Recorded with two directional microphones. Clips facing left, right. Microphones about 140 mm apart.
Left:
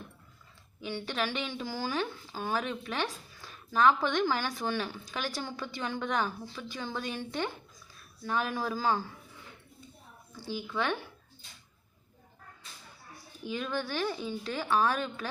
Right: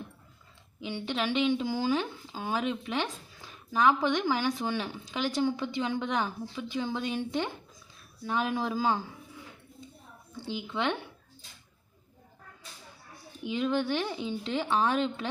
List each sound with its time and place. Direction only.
0.8 s speech: 15° right (ahead or behind)
10.3 s speech: 20° right (ahead or behind)
13.4 s speech: 20° right (ahead or behind)